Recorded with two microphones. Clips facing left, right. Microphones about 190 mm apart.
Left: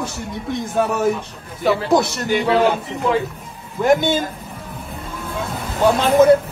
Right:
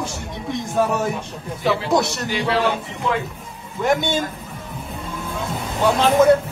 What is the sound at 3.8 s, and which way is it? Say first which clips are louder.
Speech: left 4 dB; centre (ahead or behind).